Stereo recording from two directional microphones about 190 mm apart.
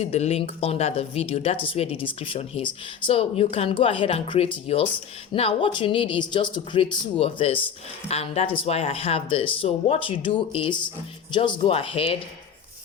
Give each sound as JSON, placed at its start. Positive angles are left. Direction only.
{"t": 0.0, "sound": "speech", "side_deg": 35}